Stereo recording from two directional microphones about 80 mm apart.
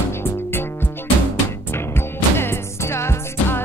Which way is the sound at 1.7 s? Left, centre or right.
Left.